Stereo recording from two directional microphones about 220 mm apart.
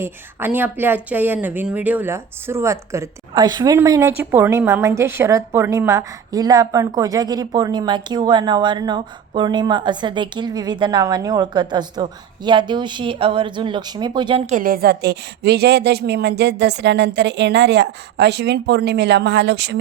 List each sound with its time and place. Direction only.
0.0 s speech: 10° right (ahead or behind); by 19.8 s 50° right (ahead or behind)